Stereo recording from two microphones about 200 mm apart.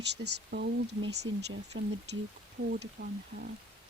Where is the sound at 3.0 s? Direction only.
60° right (ahead or behind).